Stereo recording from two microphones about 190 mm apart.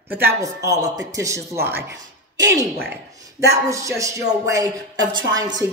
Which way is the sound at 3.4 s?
15° right (ahead or behind).